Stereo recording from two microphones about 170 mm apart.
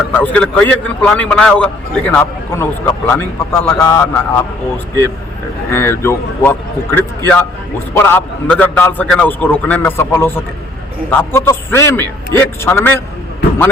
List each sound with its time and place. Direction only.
0.1 s a man's voice: 10° left (ahead or behind)
5.7 s a man's voice: 15° left (ahead or behind)